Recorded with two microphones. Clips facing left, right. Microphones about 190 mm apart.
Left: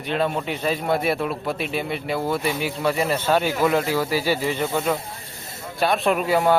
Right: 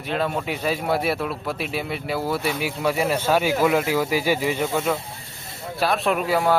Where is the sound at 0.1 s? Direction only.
5° right (ahead or behind).